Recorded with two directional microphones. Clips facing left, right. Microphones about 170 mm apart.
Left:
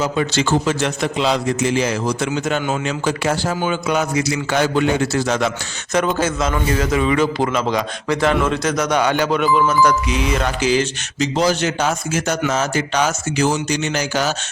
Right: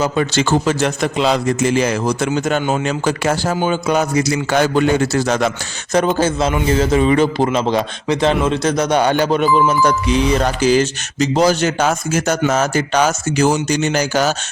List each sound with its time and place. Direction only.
0.0 s a man's voice: 45° right (ahead or behind)
6.1 s a man's voice: 30° right (ahead or behind)